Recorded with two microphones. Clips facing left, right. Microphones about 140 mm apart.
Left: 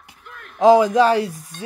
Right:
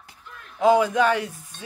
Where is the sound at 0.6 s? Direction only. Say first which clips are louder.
Left 5 dB; 35° left (ahead or behind).